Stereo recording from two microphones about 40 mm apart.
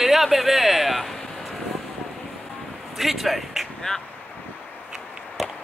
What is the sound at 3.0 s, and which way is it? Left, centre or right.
Speech, centre.